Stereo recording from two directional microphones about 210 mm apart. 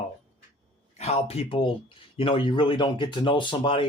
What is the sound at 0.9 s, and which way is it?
Speech, 30° left (ahead or behind).